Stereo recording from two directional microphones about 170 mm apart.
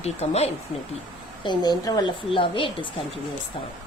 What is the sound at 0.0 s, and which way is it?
Speech, 40° left (ahead or behind).